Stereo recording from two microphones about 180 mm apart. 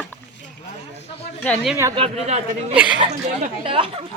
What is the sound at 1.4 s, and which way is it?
Speech, 5° left (ahead or behind).